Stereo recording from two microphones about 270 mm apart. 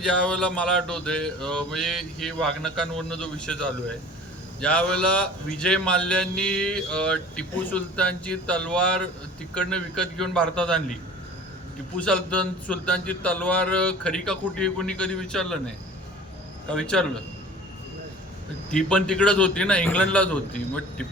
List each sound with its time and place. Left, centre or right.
0.0 s a man's voice: centre
11.9 s a man's voice: centre
16.6 s a man's voice: centre
18.7 s a man's voice: centre